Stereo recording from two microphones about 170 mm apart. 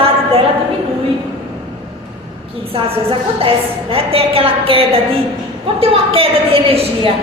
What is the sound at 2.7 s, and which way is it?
A woman's voice, 35° right (ahead or behind).